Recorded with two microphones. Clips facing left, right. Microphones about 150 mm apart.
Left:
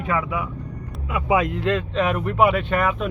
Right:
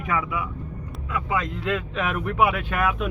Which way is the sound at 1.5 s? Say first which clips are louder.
Left 4 dB; centre (ahead or behind).